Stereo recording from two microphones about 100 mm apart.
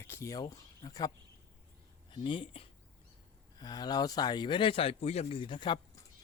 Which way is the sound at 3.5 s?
40° left (ahead or behind).